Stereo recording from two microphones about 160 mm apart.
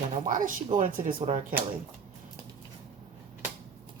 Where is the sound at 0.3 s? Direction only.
55° right (ahead or behind).